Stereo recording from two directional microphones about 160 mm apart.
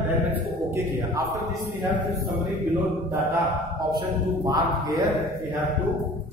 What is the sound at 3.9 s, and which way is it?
A man's voice, 25° right (ahead or behind).